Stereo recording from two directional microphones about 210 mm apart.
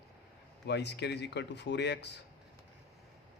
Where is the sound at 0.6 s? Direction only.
55° left (ahead or behind).